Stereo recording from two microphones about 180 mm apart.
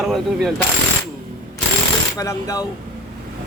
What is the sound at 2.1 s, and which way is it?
Speech, 20° left (ahead or behind).